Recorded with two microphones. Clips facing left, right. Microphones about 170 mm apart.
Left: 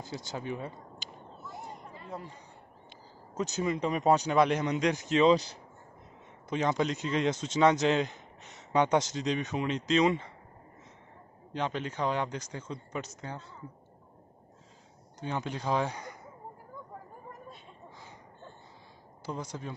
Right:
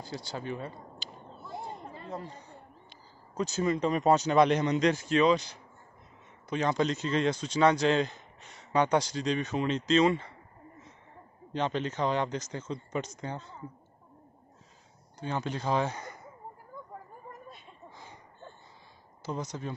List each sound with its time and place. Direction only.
0.0 s speech: 15° left (ahead or behind)
3.3 s speech: 20° left (ahead or behind)
5.3 s speech: 35° left (ahead or behind)
6.7 s speech: 10° left (ahead or behind)
11.5 s speech: 10° left (ahead or behind)
15.1 s speech: 15° left (ahead or behind)
19.2 s speech: 10° left (ahead or behind)